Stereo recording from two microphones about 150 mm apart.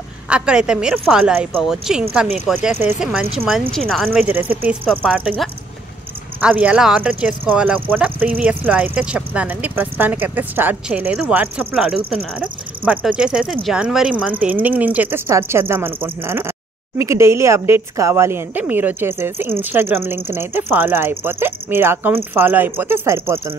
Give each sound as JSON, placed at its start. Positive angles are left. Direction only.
{"t": 0.3, "sound": "speech", "side_deg": -5}
{"t": 2.7, "sound": "speech", "side_deg": -15}
{"t": 3.0, "sound": "speech", "side_deg": -5}
{"t": 4.1, "sound": "speech", "side_deg": -10}
{"t": 6.4, "sound": "speech", "side_deg": -10}